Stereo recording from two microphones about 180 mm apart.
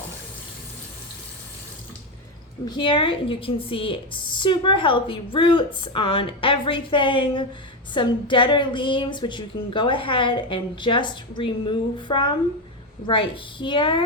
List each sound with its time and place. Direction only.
2.6 s a woman's voice: 25° left (ahead or behind)